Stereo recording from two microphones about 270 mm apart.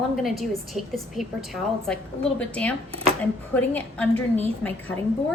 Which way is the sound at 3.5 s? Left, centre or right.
Centre.